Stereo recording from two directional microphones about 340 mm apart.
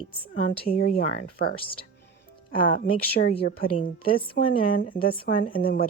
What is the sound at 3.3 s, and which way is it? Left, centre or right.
Speech, left.